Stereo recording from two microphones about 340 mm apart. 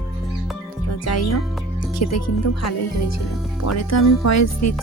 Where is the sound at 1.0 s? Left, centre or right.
Left.